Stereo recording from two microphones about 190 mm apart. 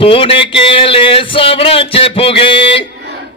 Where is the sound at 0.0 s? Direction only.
30° left (ahead or behind).